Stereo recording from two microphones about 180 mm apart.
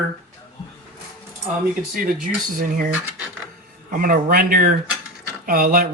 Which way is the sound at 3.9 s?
50° right (ahead or behind).